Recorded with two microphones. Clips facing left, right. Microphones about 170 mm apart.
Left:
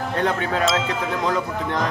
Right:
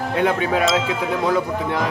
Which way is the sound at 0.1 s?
10° right (ahead or behind).